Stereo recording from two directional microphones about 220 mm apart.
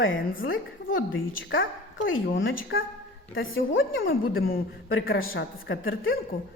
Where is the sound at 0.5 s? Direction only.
65° left (ahead or behind).